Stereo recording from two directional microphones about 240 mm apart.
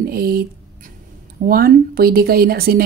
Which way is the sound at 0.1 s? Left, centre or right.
Right.